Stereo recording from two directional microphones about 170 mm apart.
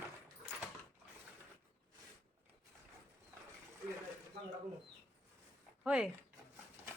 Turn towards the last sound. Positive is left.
turn(degrees=-5)  # may be behind; listen again after turning